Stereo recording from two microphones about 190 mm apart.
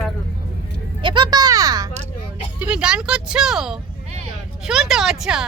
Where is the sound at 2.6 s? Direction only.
5° right (ahead or behind).